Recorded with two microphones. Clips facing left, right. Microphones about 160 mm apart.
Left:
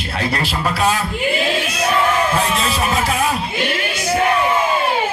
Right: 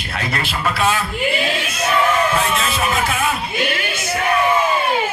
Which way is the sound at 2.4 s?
35° left (ahead or behind).